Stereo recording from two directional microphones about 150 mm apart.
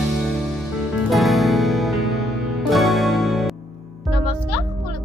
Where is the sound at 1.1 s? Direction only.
Centre (ahead or behind).